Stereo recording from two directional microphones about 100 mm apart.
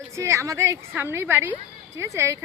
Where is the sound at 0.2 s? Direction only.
30° right (ahead or behind).